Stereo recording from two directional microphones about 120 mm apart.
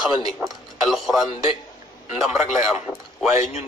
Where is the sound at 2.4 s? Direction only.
75° left (ahead or behind).